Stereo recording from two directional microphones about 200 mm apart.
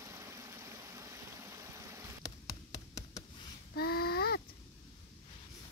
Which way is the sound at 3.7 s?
50° left (ahead or behind).